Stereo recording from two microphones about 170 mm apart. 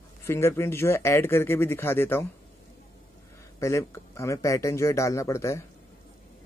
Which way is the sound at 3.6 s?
15° left (ahead or behind).